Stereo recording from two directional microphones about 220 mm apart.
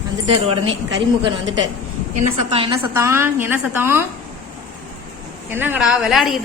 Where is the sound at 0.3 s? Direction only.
25° right (ahead or behind).